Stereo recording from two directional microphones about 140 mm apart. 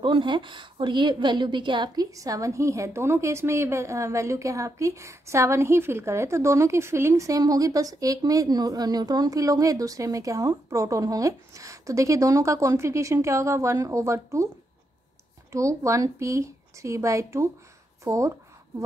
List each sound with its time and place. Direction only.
0.0 s a woman's voice: 35° right (ahead or behind)
15.5 s a woman's voice: 20° right (ahead or behind)